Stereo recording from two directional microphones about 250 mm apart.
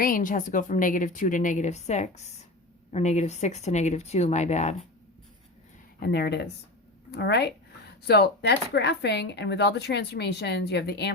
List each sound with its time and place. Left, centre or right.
0.0 s a woman's voice: left
6.0 s a woman's voice: left